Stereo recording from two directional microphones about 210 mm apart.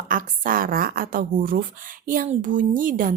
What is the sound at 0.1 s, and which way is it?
A woman's voice, 40° right (ahead or behind).